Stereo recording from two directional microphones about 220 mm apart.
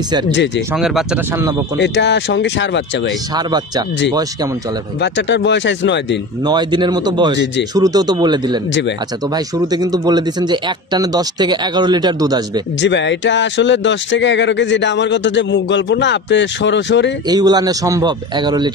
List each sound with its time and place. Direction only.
0.7 s speech: centre (ahead or behind)
1.8 s speech: 50° left (ahead or behind)
3.3 s speech: 20° right (ahead or behind)
5.0 s speech: 55° left (ahead or behind)
6.4 s speech: 20° right (ahead or behind)
12.8 s speech: 55° left (ahead or behind)
17.3 s a man's voice: 15° right (ahead or behind)